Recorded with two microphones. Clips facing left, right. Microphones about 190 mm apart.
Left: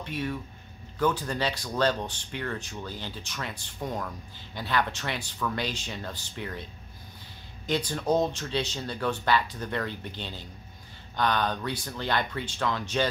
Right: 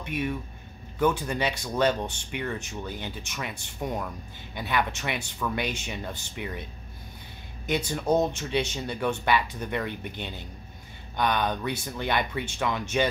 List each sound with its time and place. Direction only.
0.0 s speech: 10° right (ahead or behind)
7.6 s speech: 15° right (ahead or behind)